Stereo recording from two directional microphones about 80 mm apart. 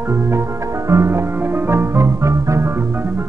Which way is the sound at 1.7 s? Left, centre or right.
Right.